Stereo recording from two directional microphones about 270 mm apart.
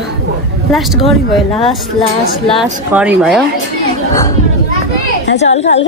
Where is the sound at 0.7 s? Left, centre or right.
Centre.